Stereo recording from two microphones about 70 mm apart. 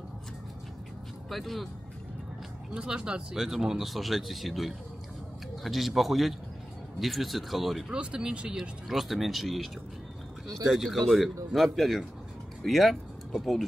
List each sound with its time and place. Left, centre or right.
1.3 s speech: centre
2.7 s speech: centre
7.9 s speech: centre
10.7 s speech: centre